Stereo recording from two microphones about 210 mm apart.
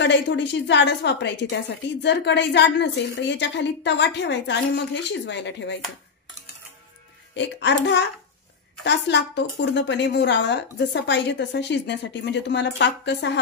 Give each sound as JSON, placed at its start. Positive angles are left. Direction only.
{"t": 0.0, "sound": "a woman's voice", "side_deg": 60}
{"t": 7.3, "sound": "a woman's voice", "side_deg": 60}